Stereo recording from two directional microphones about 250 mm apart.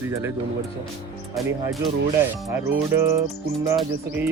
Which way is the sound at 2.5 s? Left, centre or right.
Centre.